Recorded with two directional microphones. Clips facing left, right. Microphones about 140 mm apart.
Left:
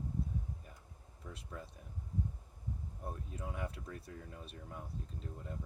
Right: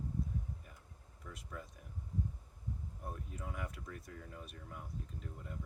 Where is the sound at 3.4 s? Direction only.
30° left (ahead or behind).